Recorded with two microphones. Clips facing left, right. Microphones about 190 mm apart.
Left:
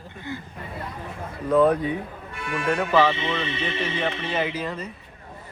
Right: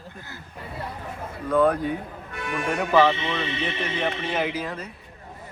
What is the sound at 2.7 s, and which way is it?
A man's voice, 10° right (ahead or behind).